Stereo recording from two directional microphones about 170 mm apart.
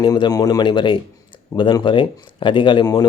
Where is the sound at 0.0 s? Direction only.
25° left (ahead or behind).